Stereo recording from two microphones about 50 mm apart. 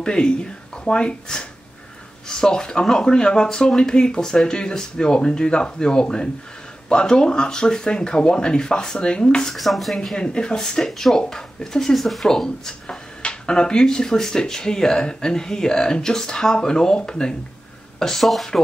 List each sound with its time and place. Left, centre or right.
0.0 s speech: centre
9.6 s speech: centre
10.1 s speech: centre